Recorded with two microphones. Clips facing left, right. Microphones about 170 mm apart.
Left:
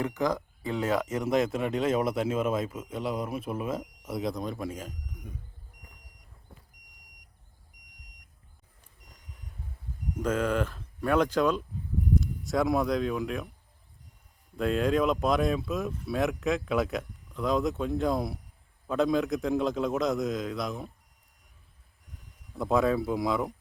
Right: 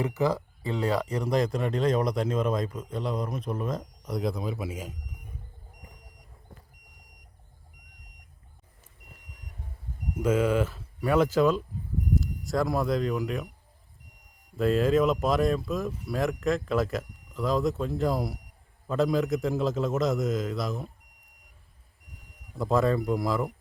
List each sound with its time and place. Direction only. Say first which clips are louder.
0.0 s speech: right 2 dB; 5° right (ahead or behind)
10.2 s speech: right 3 dB; 10° right (ahead or behind)
14.5 s speech: right 3 dB; centre (ahead or behind)
22.5 s speech: right 1 dB; centre (ahead or behind)